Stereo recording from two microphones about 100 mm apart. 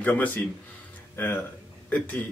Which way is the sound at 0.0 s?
15° left (ahead or behind).